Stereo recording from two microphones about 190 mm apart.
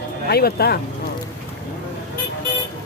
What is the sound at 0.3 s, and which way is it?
Speech, 55° left (ahead or behind).